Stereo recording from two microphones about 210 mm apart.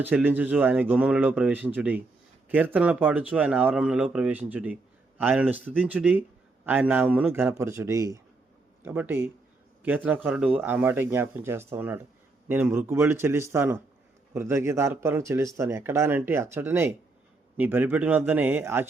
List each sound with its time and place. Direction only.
0.0 s speech: 10° right (ahead or behind)